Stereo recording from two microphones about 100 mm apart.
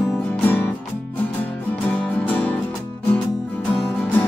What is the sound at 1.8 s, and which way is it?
Music, 15° left (ahead or behind).